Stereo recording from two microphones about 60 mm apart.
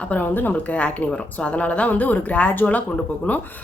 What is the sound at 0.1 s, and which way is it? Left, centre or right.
Speech, left.